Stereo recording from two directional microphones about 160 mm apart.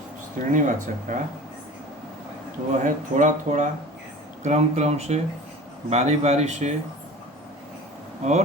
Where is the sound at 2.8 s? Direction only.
50° right (ahead or behind).